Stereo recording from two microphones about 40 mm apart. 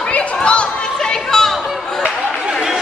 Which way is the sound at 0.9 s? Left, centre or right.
Centre.